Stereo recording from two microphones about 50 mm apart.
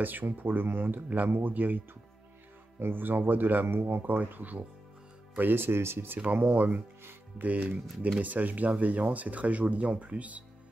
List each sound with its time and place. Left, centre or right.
0.0 s speech: right
2.8 s speech: right
5.4 s speech: right
6.1 s speech: right
7.0 s music: right
7.4 s speech: right